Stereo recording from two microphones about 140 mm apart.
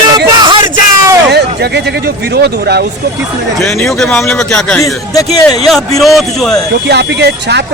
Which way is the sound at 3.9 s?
Centre (ahead or behind).